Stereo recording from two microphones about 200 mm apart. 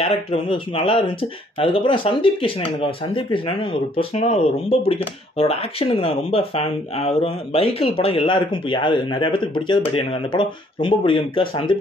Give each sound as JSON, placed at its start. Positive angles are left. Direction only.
{"t": 0.0, "sound": "speech", "side_deg": 25}